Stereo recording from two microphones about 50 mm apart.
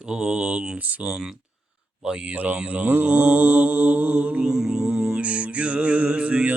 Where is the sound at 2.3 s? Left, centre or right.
Right.